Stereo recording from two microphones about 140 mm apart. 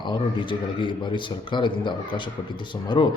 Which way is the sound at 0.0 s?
35° left (ahead or behind).